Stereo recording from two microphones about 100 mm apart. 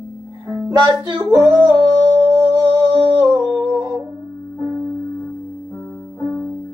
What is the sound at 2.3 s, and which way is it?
Music, 35° right (ahead or behind).